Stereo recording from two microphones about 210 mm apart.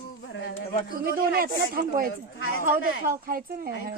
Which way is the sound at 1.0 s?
45° right (ahead or behind).